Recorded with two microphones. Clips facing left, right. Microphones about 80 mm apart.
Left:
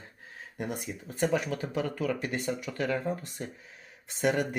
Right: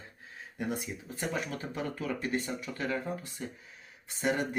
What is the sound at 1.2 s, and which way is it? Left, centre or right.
Speech, left.